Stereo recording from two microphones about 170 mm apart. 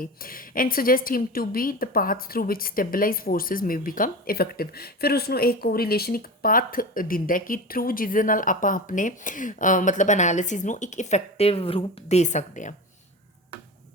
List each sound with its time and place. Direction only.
0.0 s a woman's voice: 60° left (ahead or behind)